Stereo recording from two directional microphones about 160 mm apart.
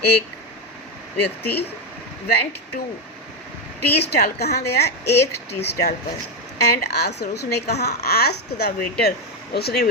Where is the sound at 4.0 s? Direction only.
85° left.